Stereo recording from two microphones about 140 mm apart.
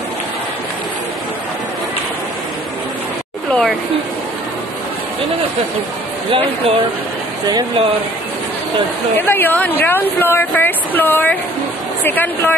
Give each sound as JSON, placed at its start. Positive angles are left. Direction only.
{"t": 6.3, "sound": "speech", "side_deg": -40}
{"t": 7.4, "sound": "speech", "side_deg": -30}
{"t": 9.1, "sound": "speech", "side_deg": 15}